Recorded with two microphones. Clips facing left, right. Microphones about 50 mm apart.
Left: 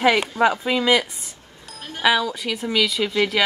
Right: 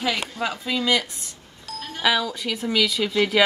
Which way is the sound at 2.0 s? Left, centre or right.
Centre.